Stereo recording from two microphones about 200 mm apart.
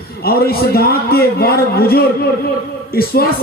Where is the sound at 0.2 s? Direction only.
50° left (ahead or behind).